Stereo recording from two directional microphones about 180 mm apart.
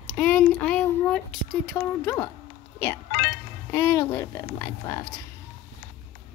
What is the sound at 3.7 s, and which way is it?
Speech, 15° left (ahead or behind).